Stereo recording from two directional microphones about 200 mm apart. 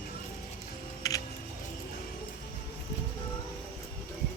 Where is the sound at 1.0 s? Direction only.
15° left (ahead or behind).